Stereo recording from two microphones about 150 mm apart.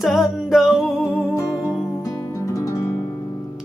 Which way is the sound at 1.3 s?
20° left (ahead or behind).